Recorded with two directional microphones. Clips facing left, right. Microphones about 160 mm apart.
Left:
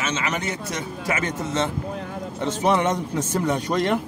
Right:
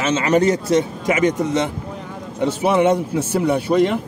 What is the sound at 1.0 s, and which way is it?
A man's voice, 15° right (ahead or behind).